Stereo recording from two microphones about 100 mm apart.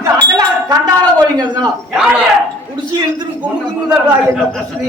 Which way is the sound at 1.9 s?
10° right (ahead or behind).